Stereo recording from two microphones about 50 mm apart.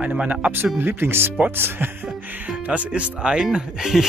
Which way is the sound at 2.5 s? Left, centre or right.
Right.